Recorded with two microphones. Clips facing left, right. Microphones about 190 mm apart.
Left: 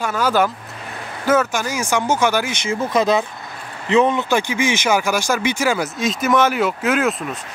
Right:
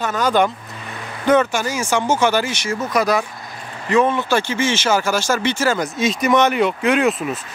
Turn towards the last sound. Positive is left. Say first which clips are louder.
# right 2 dB
turn(degrees=0)  # may be behind; listen again after turning